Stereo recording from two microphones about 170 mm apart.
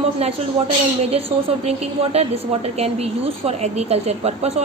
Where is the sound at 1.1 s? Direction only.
40° right (ahead or behind).